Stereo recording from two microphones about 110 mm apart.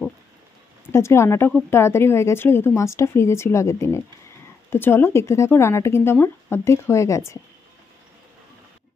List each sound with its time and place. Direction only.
0.8 s speech: 25° left (ahead or behind)